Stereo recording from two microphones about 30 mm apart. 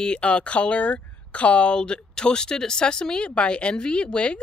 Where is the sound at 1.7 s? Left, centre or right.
Left.